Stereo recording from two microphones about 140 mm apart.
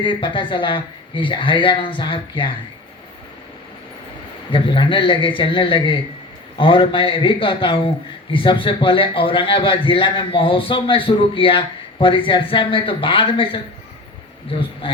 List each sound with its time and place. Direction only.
0.0 s a man's voice: 35° left (ahead or behind)
4.5 s a man's voice: 35° left (ahead or behind)
14.6 s a man's voice: 40° left (ahead or behind)